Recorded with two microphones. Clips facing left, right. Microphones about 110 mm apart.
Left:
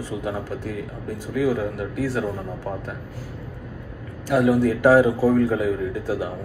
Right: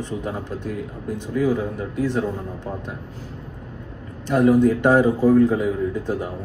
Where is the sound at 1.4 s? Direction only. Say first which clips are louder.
Right 1 dB; 20° right (ahead or behind).